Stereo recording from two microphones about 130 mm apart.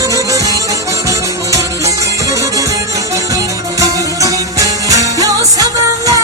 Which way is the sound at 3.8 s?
25° right (ahead or behind).